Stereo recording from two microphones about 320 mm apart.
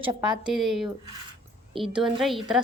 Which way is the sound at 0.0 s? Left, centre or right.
Centre.